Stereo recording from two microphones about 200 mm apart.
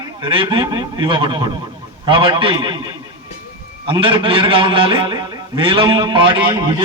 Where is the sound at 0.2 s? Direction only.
25° right (ahead or behind).